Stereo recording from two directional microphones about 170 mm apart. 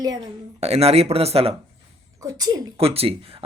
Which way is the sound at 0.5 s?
40° right (ahead or behind).